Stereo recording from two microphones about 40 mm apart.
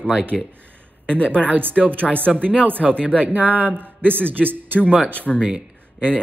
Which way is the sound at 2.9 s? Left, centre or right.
Left.